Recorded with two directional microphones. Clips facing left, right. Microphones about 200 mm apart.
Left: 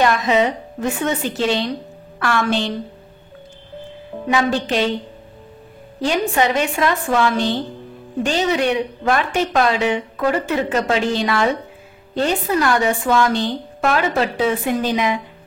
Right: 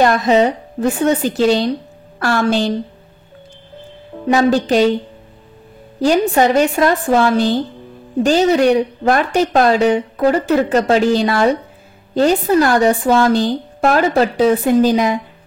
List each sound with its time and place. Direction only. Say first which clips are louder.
0.0 s a woman's voice: right 4 dB; 40° right (ahead or behind)
4.3 s speech: right 6 dB; 40° right (ahead or behind)
5.9 s speech: right 5 dB; 40° right (ahead or behind)